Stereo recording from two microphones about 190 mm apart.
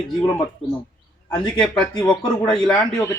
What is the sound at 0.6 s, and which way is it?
A man's voice, centre (ahead or behind).